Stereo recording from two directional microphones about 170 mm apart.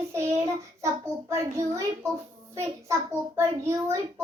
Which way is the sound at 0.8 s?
20° right (ahead or behind).